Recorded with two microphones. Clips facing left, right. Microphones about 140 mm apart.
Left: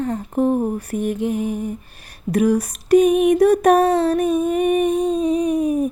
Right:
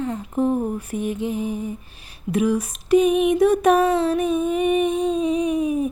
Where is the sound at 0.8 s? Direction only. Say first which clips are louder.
Left 3 dB; 45° left (ahead or behind).